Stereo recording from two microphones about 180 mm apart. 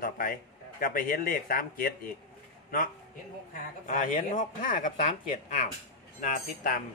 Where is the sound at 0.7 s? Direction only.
50° left (ahead or behind).